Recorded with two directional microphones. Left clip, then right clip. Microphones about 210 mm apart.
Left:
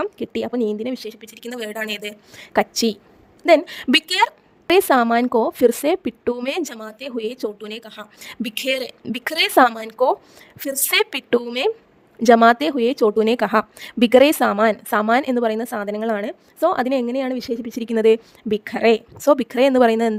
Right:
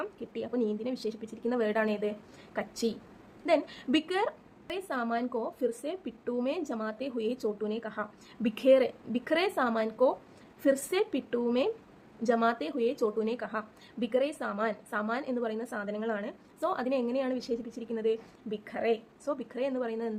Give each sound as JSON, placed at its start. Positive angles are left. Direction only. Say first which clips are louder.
{"t": 0.0, "sound": "speech", "louder": "left 13 dB", "side_deg": 50}
{"t": 1.5, "sound": "speech", "louder": "left 1 dB", "side_deg": 0}
{"t": 2.4, "sound": "speech", "louder": "left 15 dB", "side_deg": 50}